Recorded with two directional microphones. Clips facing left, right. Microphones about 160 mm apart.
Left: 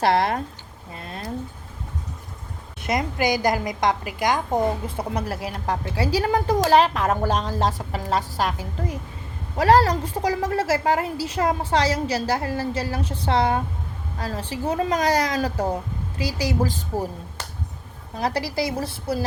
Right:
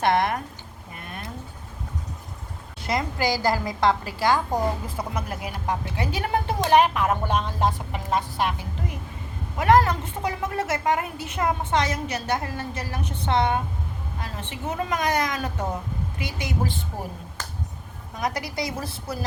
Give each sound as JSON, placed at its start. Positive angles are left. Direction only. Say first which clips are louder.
{"t": 0.0, "sound": "a woman's voice", "louder": "left 2 dB", "side_deg": 30}
{"t": 2.8, "sound": "a woman's voice", "louder": "left 2 dB", "side_deg": 20}
{"t": 18.1, "sound": "a woman's voice", "louder": "left 4 dB", "side_deg": 30}